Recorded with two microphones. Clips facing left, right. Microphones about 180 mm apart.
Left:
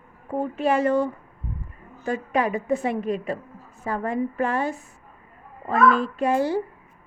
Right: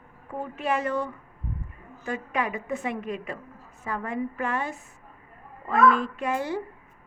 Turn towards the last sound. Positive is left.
turn(degrees=35)  # may be behind; listen again after turning